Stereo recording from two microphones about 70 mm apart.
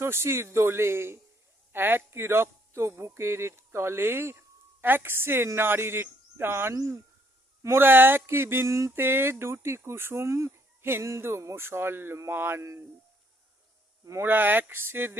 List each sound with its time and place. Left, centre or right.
0.0 s speech: right
8.6 s a sound: right
9.0 s speech: right
14.2 s speech: right